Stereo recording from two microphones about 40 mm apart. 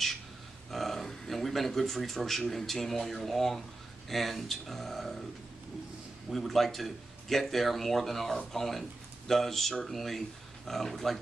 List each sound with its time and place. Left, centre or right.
0.7 s speech: centre
6.3 s speech: centre